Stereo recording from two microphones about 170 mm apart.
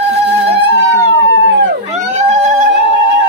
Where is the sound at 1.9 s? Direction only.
40° right (ahead or behind).